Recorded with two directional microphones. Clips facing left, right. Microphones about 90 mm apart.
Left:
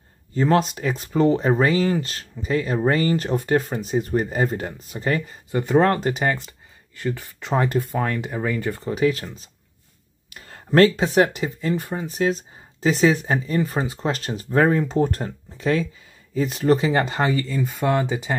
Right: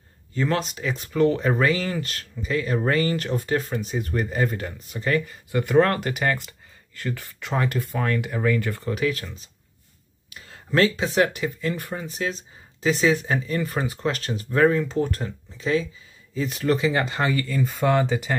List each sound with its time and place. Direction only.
0.3 s speech: 35° left (ahead or behind)
1.1 s speech: 30° left (ahead or behind)
5.5 s speech: 25° left (ahead or behind)
7.3 s speech: 30° left (ahead or behind)
9.0 s speech: 35° left (ahead or behind)
10.3 s a sound: 45° left (ahead or behind)
11.1 s speech: 35° left (ahead or behind)
12.1 s speech: 40° left (ahead or behind)
16.3 s speech: 40° left (ahead or behind)
17.6 s speech: 10° left (ahead or behind)